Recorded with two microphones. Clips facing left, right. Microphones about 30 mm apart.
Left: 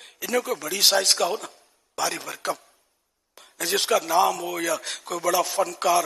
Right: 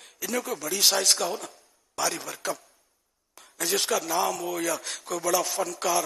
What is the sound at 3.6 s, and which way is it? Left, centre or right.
A man's voice, centre.